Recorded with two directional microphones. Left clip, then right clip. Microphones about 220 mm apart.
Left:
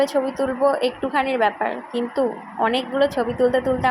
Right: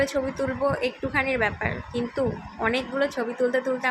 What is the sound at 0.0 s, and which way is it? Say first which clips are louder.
A woman's voice: left 5 dB; 10° left (ahead or behind).